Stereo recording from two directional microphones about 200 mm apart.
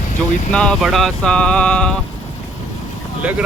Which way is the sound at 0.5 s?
5° left (ahead or behind).